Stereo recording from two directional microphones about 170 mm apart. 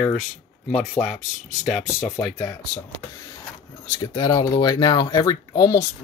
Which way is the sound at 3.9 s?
25° left (ahead or behind).